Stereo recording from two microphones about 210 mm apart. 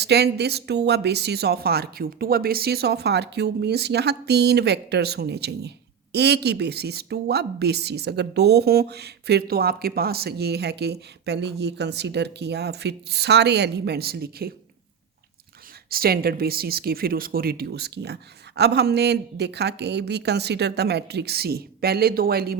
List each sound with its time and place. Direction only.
0.0 s speech: 50° right (ahead or behind)
15.9 s speech: 45° right (ahead or behind)